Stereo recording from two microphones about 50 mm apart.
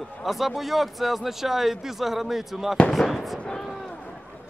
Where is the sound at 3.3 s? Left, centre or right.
Centre.